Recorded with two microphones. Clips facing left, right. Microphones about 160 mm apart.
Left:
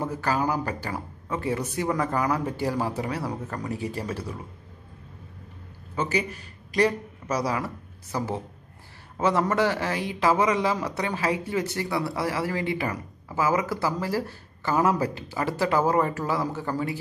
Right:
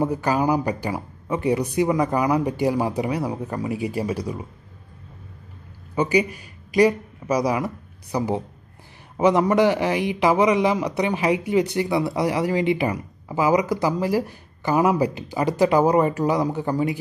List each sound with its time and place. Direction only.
0.0 s a man's voice: 15° right (ahead or behind)
5.9 s a man's voice: 15° right (ahead or behind)